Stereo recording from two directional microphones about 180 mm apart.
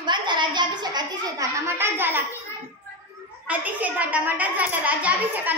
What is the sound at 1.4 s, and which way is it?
Speech, 20° right (ahead or behind).